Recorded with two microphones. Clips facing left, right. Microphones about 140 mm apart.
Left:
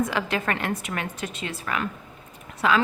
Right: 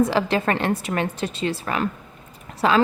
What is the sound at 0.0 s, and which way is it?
A woman's voice, 30° right (ahead or behind).